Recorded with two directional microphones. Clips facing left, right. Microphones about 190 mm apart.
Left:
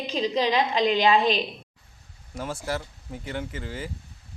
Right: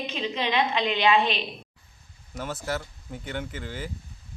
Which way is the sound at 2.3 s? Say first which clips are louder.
Left 1 dB; centre (ahead or behind).